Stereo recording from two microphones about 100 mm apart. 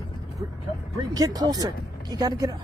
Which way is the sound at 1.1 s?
40° right (ahead or behind).